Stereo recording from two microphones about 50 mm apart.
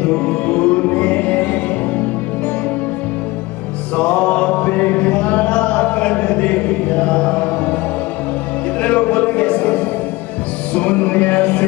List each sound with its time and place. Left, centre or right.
0.0 s music: left
3.9 s music: left
8.8 s a sound: left
10.7 s music: left